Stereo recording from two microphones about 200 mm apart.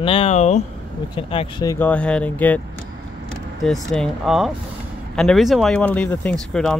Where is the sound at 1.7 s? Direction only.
10° left (ahead or behind).